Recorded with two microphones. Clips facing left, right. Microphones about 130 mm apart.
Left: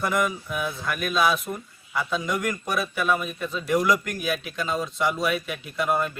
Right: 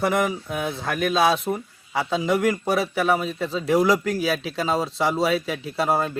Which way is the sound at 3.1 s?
85° right.